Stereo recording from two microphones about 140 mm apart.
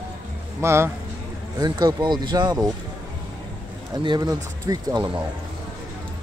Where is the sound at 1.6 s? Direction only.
30° right (ahead or behind).